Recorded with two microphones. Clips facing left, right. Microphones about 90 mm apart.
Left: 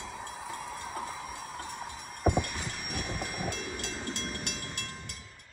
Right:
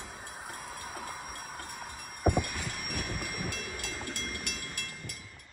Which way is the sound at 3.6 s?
50° right (ahead or behind).